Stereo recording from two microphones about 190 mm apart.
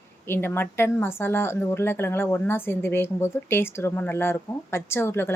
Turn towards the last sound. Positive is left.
turn(degrees=15)  # may be behind; listen again after turning